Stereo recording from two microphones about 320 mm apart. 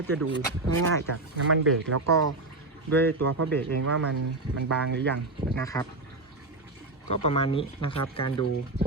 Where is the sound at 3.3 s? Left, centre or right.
Right.